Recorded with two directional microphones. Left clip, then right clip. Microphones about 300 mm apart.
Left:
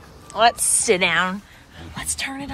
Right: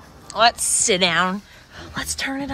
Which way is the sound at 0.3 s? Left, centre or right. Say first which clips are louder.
Even; centre.